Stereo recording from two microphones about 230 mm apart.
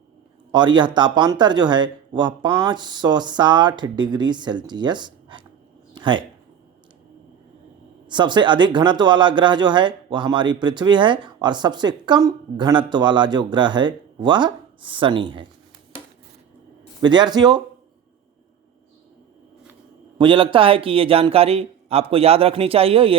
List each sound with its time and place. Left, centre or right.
0.5 s speech: centre
5.9 s a sound: centre
8.0 s speech: centre
17.0 s speech: centre
20.1 s speech: right